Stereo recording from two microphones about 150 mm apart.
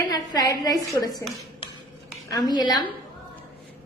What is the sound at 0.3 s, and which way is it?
Speech, 25° left (ahead or behind).